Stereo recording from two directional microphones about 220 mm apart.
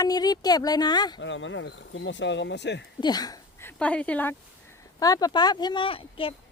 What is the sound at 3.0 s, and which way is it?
Speech, 15° left (ahead or behind).